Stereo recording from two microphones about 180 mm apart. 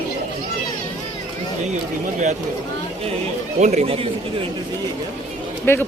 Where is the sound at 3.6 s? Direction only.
40° right (ahead or behind).